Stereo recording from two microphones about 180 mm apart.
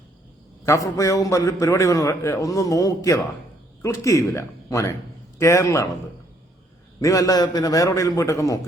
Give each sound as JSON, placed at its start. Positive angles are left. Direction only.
{"t": 0.6, "sound": "a man's voice", "side_deg": 15}
{"t": 7.0, "sound": "a man's voice", "side_deg": 20}